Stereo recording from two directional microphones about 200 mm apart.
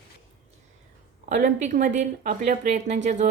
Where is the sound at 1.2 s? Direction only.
40° right (ahead or behind).